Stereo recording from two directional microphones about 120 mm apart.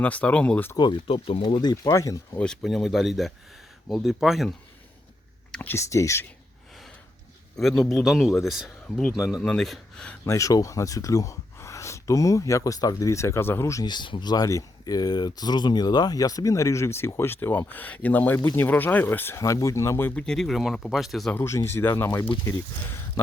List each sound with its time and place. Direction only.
0.0 s speech: 10° left (ahead or behind)
0.8 s speech: 40° left (ahead or behind)
1.7 s speech: 25° left (ahead or behind)
2.3 s speech: 10° left (ahead or behind)
5.5 s speech: 15° left (ahead or behind)
7.5 s speech: centre (ahead or behind)
10.2 s speech: 25° left (ahead or behind)
13.8 s speech: 40° left (ahead or behind); by 20.2 s 20° left (ahead or behind)
20.2 s speech: 5° left (ahead or behind)
21.3 s speech: 25° left (ahead or behind)